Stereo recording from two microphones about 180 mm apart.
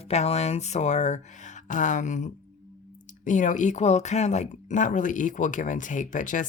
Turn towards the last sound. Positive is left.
turn(degrees=45)  # may be behind; listen again after turning